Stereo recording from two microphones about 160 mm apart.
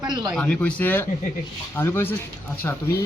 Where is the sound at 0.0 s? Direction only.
25° right (ahead or behind).